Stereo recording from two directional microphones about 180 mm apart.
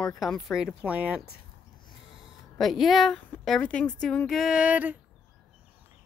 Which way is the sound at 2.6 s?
Centre (ahead or behind).